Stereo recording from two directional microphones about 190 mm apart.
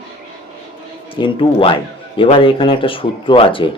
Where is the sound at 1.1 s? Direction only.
25° left (ahead or behind).